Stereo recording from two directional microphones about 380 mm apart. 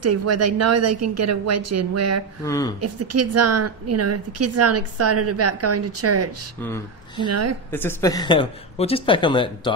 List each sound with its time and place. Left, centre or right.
0.0 s a woman's voice: right
2.4 s speech: centre
2.8 s a woman's voice: right
6.6 s speech: centre
7.2 s a woman's voice: right
7.7 s speech: centre